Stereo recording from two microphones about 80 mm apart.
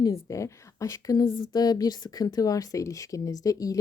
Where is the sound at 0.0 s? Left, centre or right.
Left.